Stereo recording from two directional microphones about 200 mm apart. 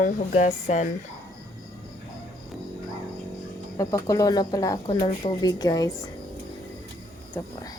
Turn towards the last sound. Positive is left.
turn(degrees=10)  # may be behind; listen again after turning